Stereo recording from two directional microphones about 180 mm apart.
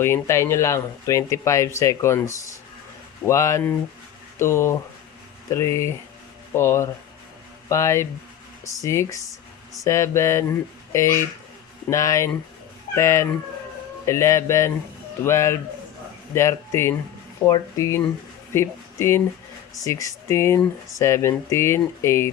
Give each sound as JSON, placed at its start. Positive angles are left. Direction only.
{"t": 0.0, "sound": "speech", "side_deg": 15}